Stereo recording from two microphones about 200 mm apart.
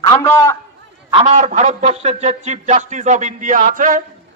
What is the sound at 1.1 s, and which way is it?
A man's voice, 30° right (ahead or behind).